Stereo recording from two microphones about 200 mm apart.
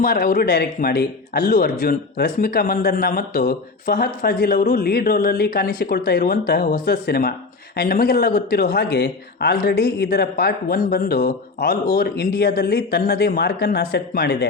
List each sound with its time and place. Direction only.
0.0 s a man's voice: 45° left (ahead or behind)